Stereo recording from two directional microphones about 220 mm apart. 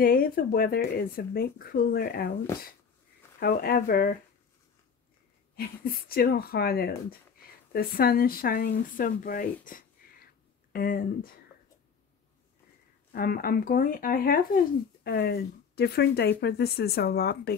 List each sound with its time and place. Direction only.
0.0 s speech: 40° left (ahead or behind)
3.3 s speech: 45° left (ahead or behind)
5.6 s speech: 40° left (ahead or behind)
13.1 s speech: 40° left (ahead or behind)